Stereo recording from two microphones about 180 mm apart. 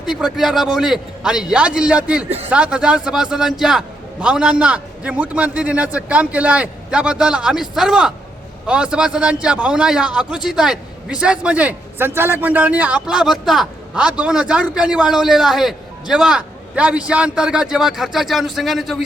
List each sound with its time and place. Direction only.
0.0 s a man's voice: 5° right (ahead or behind)